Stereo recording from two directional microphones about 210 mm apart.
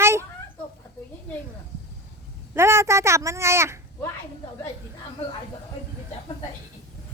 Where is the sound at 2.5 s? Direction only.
10° right (ahead or behind).